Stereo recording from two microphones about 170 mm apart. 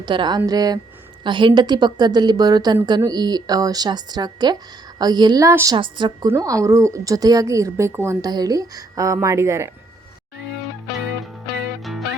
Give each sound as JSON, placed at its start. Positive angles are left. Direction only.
{"t": 0.0, "sound": "a woman's voice", "side_deg": -25}
{"t": 5.7, "sound": "a woman's voice", "side_deg": -30}